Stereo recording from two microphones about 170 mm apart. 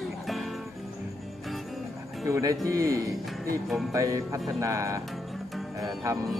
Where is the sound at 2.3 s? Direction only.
20° right (ahead or behind).